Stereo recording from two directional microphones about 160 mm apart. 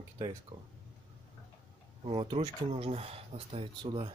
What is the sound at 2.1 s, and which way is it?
Speech, 30° right (ahead or behind).